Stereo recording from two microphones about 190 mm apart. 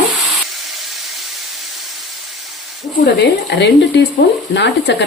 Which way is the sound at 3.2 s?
65° left (ahead or behind).